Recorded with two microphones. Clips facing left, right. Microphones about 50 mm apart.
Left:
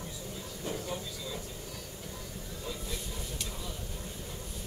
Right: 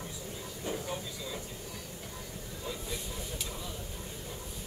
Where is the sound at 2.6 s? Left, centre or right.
Centre.